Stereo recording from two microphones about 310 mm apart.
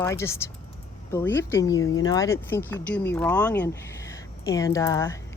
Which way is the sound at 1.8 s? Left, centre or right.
Left.